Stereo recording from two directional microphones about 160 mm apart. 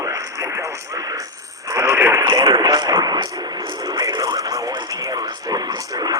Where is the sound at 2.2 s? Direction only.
25° right (ahead or behind).